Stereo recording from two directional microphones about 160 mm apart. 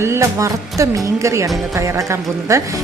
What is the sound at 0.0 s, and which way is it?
A woman's voice, 15° right (ahead or behind).